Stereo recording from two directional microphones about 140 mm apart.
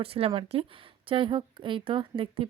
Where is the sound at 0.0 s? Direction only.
40° right (ahead or behind).